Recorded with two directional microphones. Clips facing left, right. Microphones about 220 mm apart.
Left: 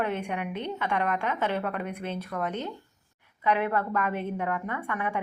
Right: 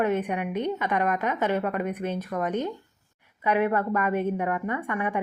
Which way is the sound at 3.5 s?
10° right (ahead or behind).